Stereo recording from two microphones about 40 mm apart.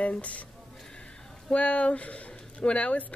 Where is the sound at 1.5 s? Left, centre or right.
Left.